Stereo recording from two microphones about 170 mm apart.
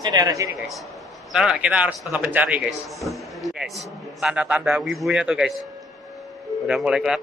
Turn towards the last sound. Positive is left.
turn(degrees=-5)  # may be behind; listen again after turning